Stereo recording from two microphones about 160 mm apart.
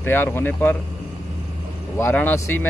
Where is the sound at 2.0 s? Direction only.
10° left (ahead or behind).